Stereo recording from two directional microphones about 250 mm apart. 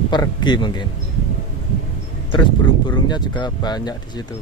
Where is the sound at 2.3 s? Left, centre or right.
Centre.